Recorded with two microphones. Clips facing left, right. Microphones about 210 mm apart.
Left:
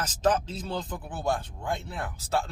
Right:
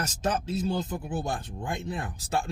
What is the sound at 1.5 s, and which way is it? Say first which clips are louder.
Speech: even; 15° right (ahead or behind).